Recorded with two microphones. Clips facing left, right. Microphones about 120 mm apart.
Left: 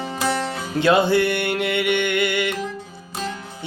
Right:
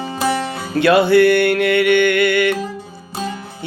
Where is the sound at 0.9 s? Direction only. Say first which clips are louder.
Right 6 dB; 20° left (ahead or behind).